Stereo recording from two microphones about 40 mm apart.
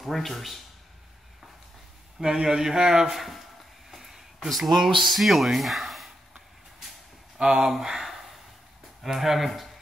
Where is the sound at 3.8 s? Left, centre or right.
Centre.